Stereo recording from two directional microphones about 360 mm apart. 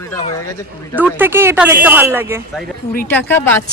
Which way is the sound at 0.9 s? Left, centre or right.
Centre.